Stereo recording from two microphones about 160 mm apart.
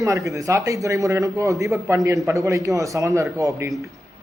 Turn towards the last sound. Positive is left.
turn(degrees=-20)  # may be behind; listen again after turning